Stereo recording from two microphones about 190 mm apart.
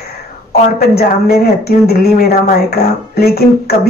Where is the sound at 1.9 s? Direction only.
55° left (ahead or behind).